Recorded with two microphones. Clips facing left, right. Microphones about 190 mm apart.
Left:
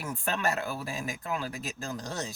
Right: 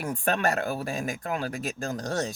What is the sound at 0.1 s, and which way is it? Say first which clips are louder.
Speech: right 4 dB; 50° right (ahead or behind).